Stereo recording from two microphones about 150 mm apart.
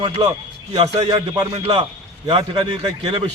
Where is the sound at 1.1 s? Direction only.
30° right (ahead or behind).